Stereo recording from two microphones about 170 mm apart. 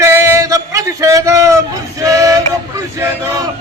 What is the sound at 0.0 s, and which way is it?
Music, 15° right (ahead or behind).